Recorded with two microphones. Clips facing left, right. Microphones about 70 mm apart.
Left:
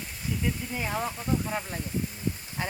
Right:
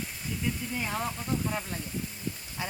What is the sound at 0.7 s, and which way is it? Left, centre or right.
Speech, centre.